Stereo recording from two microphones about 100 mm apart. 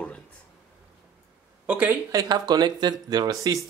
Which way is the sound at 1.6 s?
20° right (ahead or behind).